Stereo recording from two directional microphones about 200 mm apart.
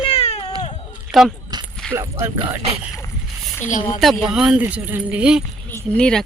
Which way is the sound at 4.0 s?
Centre (ahead or behind).